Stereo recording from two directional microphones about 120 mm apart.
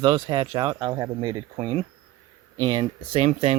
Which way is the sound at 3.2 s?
60° right (ahead or behind).